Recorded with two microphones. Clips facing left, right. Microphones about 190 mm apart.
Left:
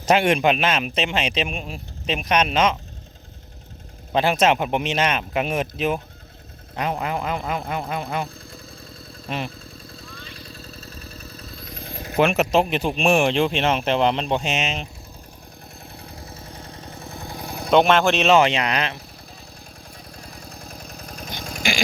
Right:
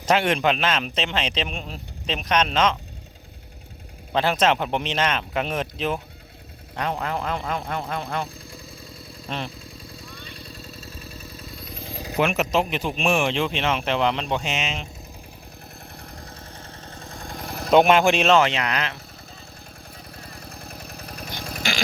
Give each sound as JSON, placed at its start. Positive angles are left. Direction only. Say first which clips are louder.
{"t": 0.0, "sound": "a man's voice", "louder": "left 3 dB", "side_deg": 15}
{"t": 4.1, "sound": "a man's voice", "louder": "left 2 dB", "side_deg": 15}
{"t": 9.3, "sound": "speech", "louder": "left 2 dB", "side_deg": 10}
{"t": 10.7, "sound": "vehicle", "louder": "even", "side_deg": 0}
{"t": 12.1, "sound": "speech", "louder": "left 4 dB", "side_deg": 30}
{"t": 13.1, "sound": "speech", "louder": "left 4 dB", "side_deg": 50}
{"t": 13.6, "sound": "speech", "louder": "left 3 dB", "side_deg": 40}
{"t": 16.1, "sound": "vehicle", "louder": "left 2 dB", "side_deg": 15}
{"t": 17.5, "sound": "vehicle", "louder": "even", "side_deg": 0}
{"t": 18.0, "sound": "speech", "louder": "even", "side_deg": -10}
{"t": 18.3, "sound": "speech", "louder": "left 2 dB", "side_deg": 20}
{"t": 20.1, "sound": "vehicle", "louder": "even", "side_deg": -5}
{"t": 21.6, "sound": "a sound", "louder": "left 4 dB", "side_deg": 15}